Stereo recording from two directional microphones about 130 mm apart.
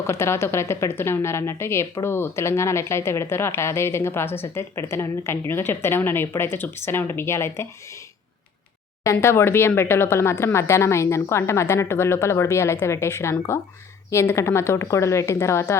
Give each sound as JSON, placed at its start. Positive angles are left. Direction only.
{"t": 0.1, "sound": "a woman's voice", "side_deg": 20}
{"t": 9.2, "sound": "a woman's voice", "side_deg": 20}
{"t": 14.3, "sound": "a woman's voice", "side_deg": 20}